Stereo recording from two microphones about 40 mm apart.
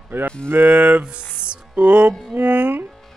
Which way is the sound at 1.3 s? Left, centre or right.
Right.